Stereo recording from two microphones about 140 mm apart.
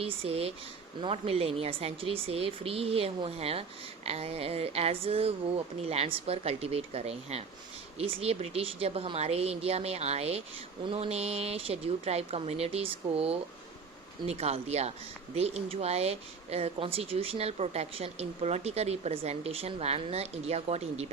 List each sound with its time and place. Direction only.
0.0 s speech: 45° right (ahead or behind)